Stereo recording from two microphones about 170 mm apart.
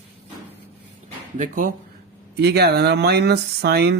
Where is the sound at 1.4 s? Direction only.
50° right (ahead or behind).